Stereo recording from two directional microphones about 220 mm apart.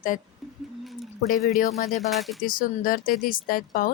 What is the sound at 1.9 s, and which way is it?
Speech, centre (ahead or behind).